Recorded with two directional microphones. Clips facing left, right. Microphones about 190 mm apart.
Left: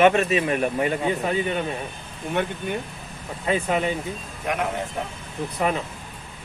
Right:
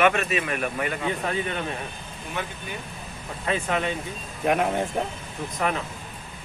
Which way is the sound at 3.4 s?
10° left (ahead or behind).